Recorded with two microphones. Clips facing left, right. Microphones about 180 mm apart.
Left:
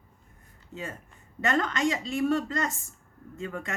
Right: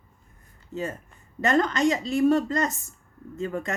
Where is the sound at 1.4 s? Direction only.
35° right (ahead or behind).